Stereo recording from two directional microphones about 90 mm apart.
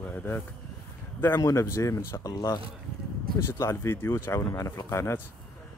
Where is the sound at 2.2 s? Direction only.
45° left (ahead or behind).